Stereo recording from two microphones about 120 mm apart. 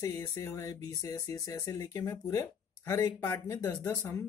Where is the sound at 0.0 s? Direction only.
30° left (ahead or behind).